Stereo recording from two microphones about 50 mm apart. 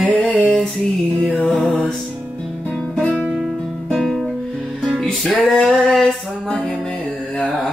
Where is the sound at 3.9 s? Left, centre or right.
Centre.